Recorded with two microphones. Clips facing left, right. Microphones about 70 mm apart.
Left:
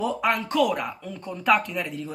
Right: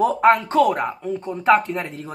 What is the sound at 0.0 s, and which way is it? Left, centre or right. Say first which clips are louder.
Speech: right 9 dB; right.